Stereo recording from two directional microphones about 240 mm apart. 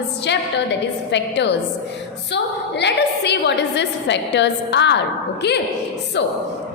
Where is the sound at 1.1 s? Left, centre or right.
Left.